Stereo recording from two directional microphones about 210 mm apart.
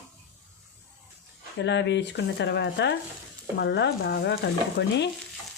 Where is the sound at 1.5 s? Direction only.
55° left (ahead or behind).